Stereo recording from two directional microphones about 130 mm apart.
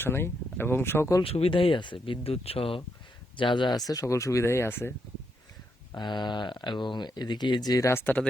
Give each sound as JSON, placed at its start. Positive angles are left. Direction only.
{"t": 0.0, "sound": "speech", "side_deg": 15}
{"t": 1.2, "sound": "speech", "side_deg": 45}
{"t": 5.9, "sound": "speech", "side_deg": 35}